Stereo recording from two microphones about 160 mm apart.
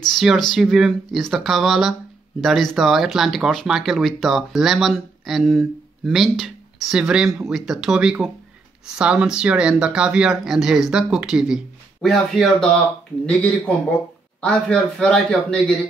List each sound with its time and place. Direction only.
0.0 s speech: centre (ahead or behind)